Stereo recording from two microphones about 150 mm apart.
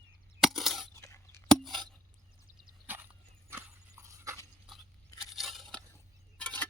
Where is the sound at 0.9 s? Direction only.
20° left (ahead or behind).